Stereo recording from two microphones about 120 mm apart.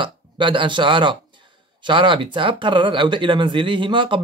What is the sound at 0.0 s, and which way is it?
Speech, 45° right (ahead or behind).